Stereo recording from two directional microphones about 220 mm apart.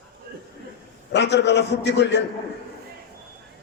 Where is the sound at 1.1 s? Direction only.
50° left (ahead or behind).